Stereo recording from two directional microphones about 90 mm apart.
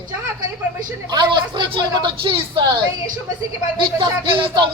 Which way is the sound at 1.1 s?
60° right (ahead or behind).